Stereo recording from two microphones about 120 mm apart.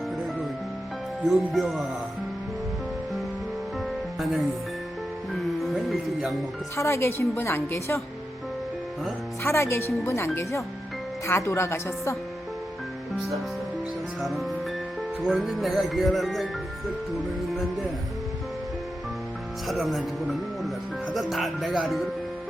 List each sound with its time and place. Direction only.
1.2 s speech: centre (ahead or behind)
3.8 s music: centre (ahead or behind)
5.5 s speech: centre (ahead or behind)
6.7 s a woman's voice: 25° left (ahead or behind)
9.4 s a woman's voice: 20° left (ahead or behind)
14.2 s speech: centre (ahead or behind)
19.6 s speech: centre (ahead or behind)